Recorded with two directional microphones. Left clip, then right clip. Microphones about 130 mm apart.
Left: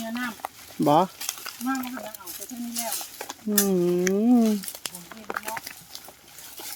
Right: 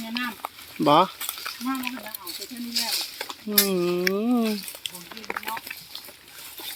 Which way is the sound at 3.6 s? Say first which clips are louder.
Even; 40° left (ahead or behind).